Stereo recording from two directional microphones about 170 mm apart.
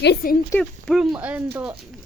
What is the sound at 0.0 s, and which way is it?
Speech, 70° left (ahead or behind).